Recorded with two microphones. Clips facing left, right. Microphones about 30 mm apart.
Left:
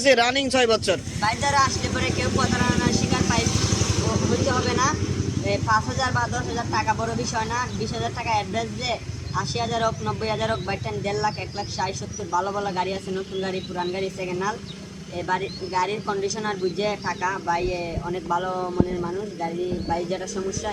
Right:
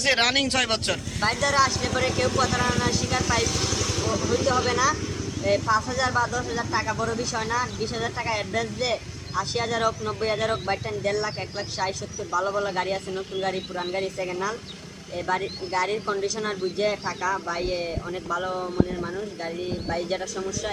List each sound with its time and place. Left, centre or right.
0.0 s speech: right
1.4 s speech: centre
1.6 s speech: right
2.0 s vehicle: centre
4.2 s speech: centre
12.6 s speech: centre
17.1 s speech: centre
17.3 s speech: centre
19.4 s speech: right